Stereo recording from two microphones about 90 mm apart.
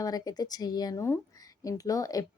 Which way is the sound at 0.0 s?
45° left (ahead or behind).